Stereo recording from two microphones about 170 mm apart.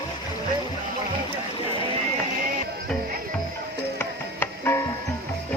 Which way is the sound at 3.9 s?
15° left (ahead or behind).